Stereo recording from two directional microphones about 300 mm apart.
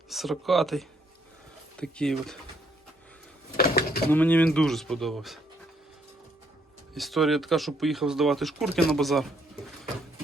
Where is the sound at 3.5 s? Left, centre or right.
Left.